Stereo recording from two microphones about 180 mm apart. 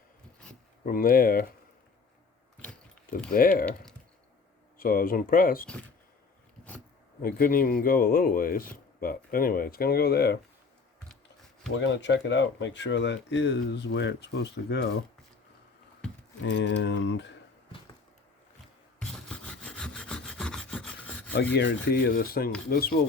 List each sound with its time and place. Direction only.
0.9 s speech: 55° left (ahead or behind)
3.3 s speech: 50° left (ahead or behind)
4.8 s speech: 50° left (ahead or behind)
7.2 s speech: 50° left (ahead or behind)
11.7 s speech: 85° left
16.4 s speech: 75° left (ahead or behind)
18.9 s wood: 5° left (ahead or behind)
21.5 s rub: 65° left (ahead or behind)
22.7 s speech: 55° left (ahead or behind)